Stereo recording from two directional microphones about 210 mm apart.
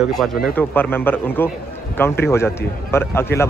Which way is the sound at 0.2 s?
Centre (ahead or behind).